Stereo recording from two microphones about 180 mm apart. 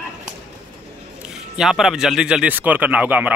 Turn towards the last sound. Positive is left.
turn(degrees=-10)  # may be behind; listen again after turning